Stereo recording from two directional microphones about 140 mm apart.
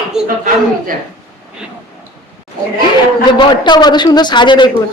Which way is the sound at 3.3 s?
35° left (ahead or behind).